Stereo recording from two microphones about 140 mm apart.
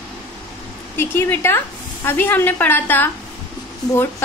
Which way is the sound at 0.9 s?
15° left (ahead or behind).